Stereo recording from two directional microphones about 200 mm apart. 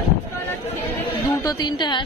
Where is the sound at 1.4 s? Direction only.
20° left (ahead or behind).